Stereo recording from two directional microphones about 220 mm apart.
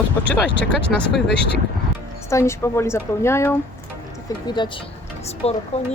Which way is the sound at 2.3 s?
10° left (ahead or behind).